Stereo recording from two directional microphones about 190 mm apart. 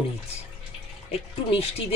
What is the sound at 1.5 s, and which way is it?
Speech, 30° left (ahead or behind).